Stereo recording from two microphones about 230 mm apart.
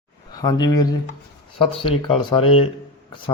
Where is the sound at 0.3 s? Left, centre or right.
Centre.